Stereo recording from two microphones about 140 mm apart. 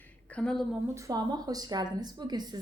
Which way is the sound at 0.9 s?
25° right (ahead or behind).